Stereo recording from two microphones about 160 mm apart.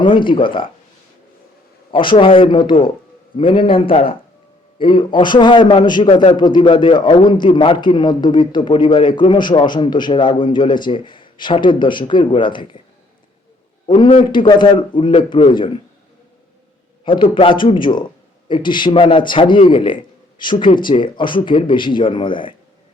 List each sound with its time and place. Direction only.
0.0 s a man's voice: 30° left (ahead or behind)
1.9 s a man's voice: 30° left (ahead or behind)
13.8 s a man's voice: 30° left (ahead or behind)
17.1 s a man's voice: 35° left (ahead or behind)